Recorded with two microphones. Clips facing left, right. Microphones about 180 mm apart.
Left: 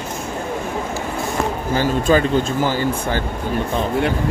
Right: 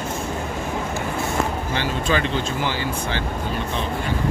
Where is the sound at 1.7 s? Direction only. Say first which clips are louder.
Left 10 dB; 40° left (ahead or behind).